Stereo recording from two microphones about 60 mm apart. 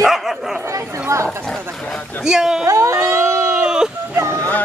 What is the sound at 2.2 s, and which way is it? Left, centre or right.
Speech, centre.